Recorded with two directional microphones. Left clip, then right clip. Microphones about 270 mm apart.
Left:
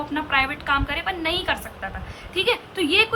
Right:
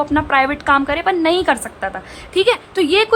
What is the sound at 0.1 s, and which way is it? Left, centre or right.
A woman's voice, centre.